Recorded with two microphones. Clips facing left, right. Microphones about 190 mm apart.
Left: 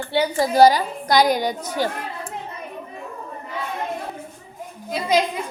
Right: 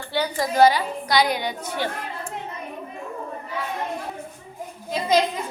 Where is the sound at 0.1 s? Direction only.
25° left (ahead or behind).